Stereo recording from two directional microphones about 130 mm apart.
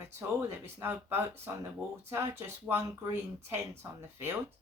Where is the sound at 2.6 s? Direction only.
15° right (ahead or behind).